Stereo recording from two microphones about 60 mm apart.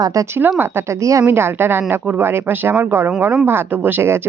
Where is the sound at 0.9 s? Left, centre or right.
Right.